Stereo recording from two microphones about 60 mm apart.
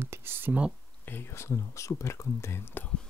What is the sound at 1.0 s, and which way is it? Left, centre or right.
Speech, left.